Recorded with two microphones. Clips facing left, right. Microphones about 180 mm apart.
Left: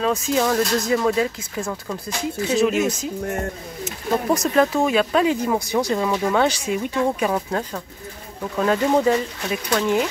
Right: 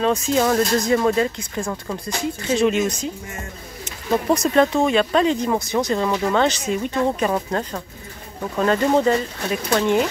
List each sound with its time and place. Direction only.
0.0 s speech: centre (ahead or behind)
3.8 s speech: centre (ahead or behind)